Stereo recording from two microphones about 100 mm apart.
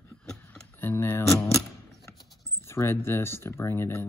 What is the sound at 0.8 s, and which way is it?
Speech, 25° left (ahead or behind).